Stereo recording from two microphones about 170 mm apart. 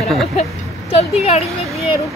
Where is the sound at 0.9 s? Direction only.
35° left (ahead or behind).